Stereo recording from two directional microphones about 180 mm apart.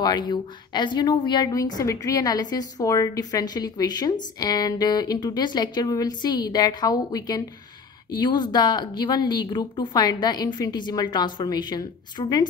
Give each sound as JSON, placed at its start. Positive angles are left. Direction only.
{"t": 0.0, "sound": "a woman's voice", "side_deg": 25}